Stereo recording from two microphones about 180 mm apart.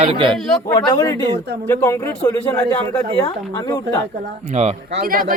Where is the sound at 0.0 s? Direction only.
30° right (ahead or behind).